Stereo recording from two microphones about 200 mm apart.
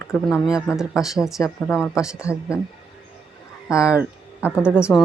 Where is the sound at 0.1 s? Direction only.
10° left (ahead or behind).